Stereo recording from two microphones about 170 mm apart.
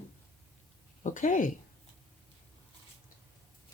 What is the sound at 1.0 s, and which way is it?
Speech, 50° left (ahead or behind).